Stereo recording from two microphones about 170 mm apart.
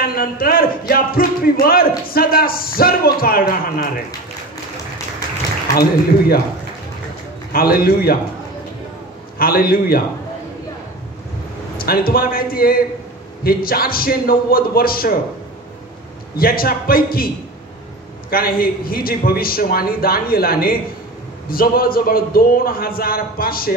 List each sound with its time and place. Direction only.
0.0 s speech: 60° left (ahead or behind)
5.8 s speech: 65° left (ahead or behind)
7.5 s speech: 60° left (ahead or behind)
9.4 s speech: 60° left (ahead or behind)
11.8 s speech: 60° left (ahead or behind)
16.3 s speech: 60° left (ahead or behind)
18.3 s speech: 60° left (ahead or behind)